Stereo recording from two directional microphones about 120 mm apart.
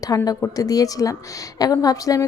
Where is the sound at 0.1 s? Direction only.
25° left (ahead or behind).